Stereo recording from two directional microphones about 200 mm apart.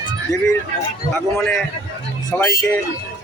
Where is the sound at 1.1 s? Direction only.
5° left (ahead or behind).